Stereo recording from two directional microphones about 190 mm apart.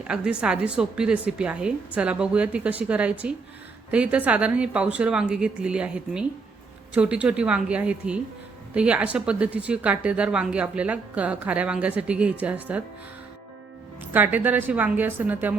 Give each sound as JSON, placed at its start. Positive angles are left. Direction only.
{"t": 0.1, "sound": "a woman's voice", "side_deg": -5}
{"t": 14.0, "sound": "speech", "side_deg": -10}